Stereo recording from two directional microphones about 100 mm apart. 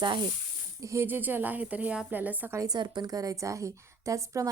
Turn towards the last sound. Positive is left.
turn(degrees=-35)  # may be behind; listen again after turning